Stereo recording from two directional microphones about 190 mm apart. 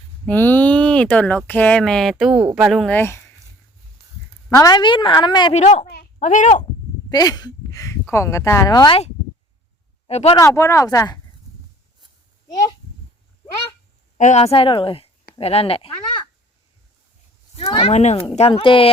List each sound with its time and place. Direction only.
0.3 s speech: 10° left (ahead or behind)
4.5 s speech: 20° left (ahead or behind)
5.5 s a child's voice: 40° left (ahead or behind)
7.1 s speech: 20° left (ahead or behind)
10.1 s speech: 35° left (ahead or behind)
10.3 s speech: 15° left (ahead or behind)
14.2 s speech: 40° left (ahead or behind)
17.7 s speech: 30° left (ahead or behind)